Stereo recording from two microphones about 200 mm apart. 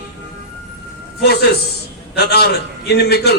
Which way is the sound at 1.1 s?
55° left (ahead or behind).